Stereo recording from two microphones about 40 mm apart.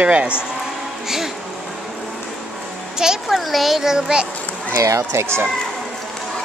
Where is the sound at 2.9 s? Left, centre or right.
Centre.